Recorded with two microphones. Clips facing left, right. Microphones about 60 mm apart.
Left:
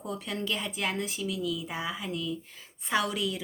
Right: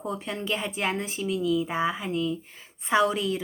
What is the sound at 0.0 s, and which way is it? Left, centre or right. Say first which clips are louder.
A woman's voice: right 3 dB; right.